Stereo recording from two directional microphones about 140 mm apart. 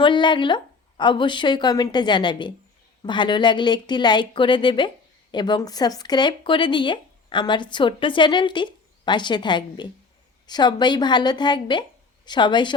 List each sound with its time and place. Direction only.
0.0 s speech: 35° left (ahead or behind)